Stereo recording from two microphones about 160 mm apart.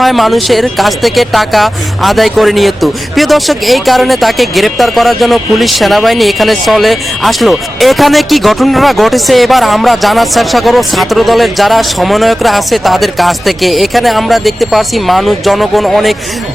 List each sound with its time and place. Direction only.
0.0 s speech: centre (ahead or behind)